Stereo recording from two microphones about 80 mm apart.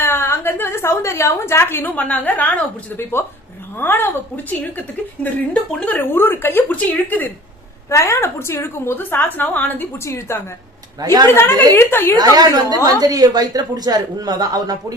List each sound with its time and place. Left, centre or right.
0.0 s a sound: left
2.0 s a woman's voice: centre
3.0 s a woman's voice: left
7.9 s a woman's voice: left
10.0 s a woman's voice: left
11.0 s a woman's voice: right
11.3 s a woman's voice: left
12.1 s a woman's voice: right